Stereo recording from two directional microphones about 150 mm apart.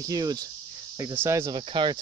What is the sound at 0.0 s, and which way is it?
Cricket, 25° right (ahead or behind).